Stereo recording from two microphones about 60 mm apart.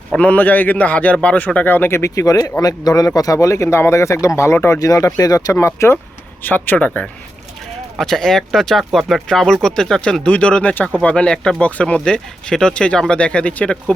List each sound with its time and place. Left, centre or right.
0.2 s a man's voice: left
1.5 s speech: left
1.9 s speech: left
2.1 s speech: left
3.2 s speech: left
4.8 s speech: left
5.6 s speech: left
6.4 s a man's voice: left
8.0 s a man's voice: centre; by 13.7 s left